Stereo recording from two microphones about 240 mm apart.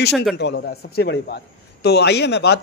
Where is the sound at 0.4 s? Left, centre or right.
Left.